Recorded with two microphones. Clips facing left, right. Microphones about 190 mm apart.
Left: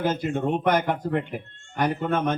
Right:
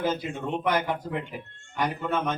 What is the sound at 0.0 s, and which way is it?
A man's voice, 50° left (ahead or behind).